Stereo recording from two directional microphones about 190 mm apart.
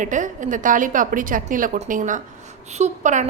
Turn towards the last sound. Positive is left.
turn(degrees=-40)  # may be behind; listen again after turning